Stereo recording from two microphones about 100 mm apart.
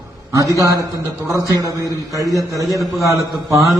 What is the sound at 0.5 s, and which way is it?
A man's voice, 35° right (ahead or behind).